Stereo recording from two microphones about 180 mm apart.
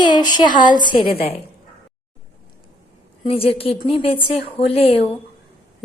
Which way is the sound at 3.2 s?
30° left (ahead or behind).